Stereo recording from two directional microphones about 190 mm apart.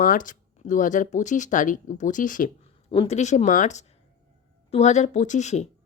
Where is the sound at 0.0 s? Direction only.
45° left (ahead or behind).